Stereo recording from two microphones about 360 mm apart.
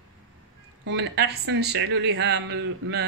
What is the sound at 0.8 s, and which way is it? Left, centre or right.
Speech, right.